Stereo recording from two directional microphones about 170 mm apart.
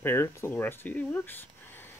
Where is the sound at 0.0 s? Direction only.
15° left (ahead or behind).